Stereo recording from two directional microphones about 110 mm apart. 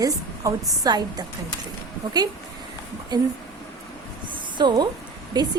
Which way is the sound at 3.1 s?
40° right (ahead or behind).